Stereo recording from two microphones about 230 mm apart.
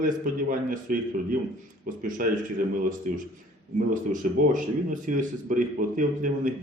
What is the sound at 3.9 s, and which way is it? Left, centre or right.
Speech, right.